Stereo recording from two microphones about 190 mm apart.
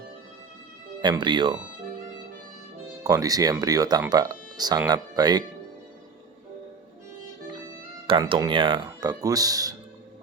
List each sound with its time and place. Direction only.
1.0 s speech: 25° right (ahead or behind)
3.0 s speech: 20° right (ahead or behind)
8.0 s speech: 25° right (ahead or behind)